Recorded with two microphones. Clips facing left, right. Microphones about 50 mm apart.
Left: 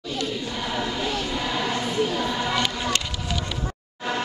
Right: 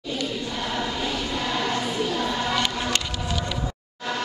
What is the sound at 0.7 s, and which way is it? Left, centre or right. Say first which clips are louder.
Choir: left 2 dB; centre.